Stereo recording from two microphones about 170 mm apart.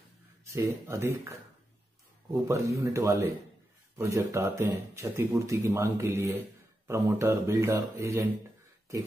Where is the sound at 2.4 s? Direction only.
20° right (ahead or behind).